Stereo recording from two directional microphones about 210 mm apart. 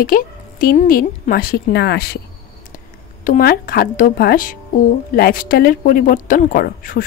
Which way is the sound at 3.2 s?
40° left (ahead or behind).